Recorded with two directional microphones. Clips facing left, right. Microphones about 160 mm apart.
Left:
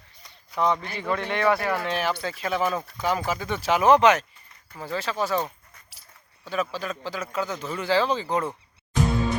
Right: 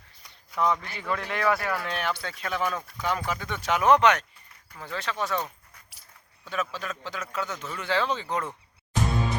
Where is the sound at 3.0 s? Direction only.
5° left (ahead or behind).